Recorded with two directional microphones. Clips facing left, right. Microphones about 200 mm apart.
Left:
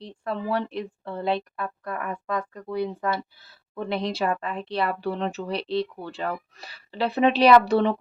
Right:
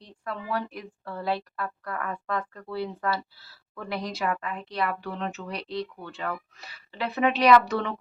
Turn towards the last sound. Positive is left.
turn(degrees=30)  # may be behind; listen again after turning